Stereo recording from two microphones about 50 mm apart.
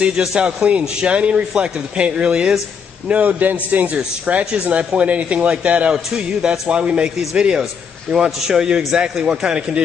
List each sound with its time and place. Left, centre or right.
0.0 s speech: centre
3.1 s a man's voice: right